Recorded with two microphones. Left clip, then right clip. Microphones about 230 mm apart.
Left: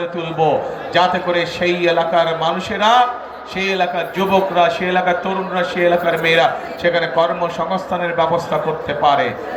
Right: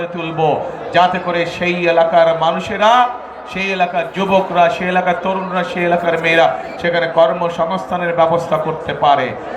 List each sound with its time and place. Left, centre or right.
0.9 s a man's voice: right